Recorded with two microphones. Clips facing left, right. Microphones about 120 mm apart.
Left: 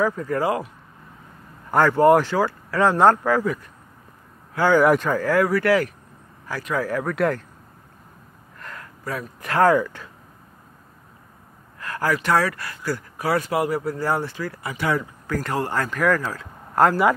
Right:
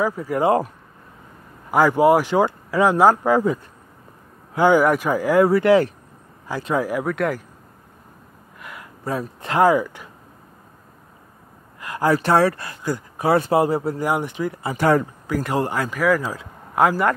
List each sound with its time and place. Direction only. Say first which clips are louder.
0.0 s speech: even; 10° right (ahead or behind)
1.7 s speech: even; 10° right (ahead or behind)
3.3 s speech: right 3 dB; 20° right (ahead or behind)
7.1 s speech: even; centre (ahead or behind)
8.5 s a sound: even; 10° right (ahead or behind)
9.0 s speech: right 4 dB; 25° right (ahead or behind)
9.6 s speech: right 1 dB; 10° right (ahead or behind)
11.8 s a sound: right 4 dB; 15° right (ahead or behind)
12.1 s speech: right 4 dB; 30° right (ahead or behind)
14.0 s speech: right 2 dB; 15° right (ahead or behind)
14.7 s speech: right 6 dB; 45° right (ahead or behind)
15.2 s speech: right 3 dB; 15° right (ahead or behind)
16.7 s speech: left 1 dB; centre (ahead or behind)